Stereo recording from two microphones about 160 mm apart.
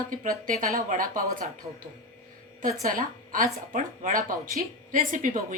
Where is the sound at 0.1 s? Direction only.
55° right (ahead or behind).